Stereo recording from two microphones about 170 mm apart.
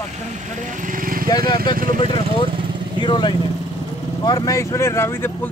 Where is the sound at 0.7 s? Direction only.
50° right (ahead or behind).